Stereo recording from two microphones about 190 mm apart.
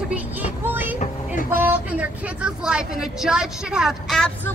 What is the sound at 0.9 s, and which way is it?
Vehicle, 40° left (ahead or behind).